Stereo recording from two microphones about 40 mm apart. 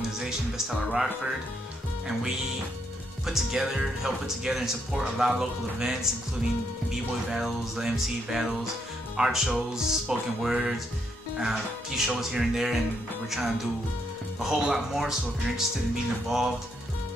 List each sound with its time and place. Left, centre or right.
0.2 s speech: centre
3.3 s speech: centre
7.2 s speech: centre
14.4 s speech: centre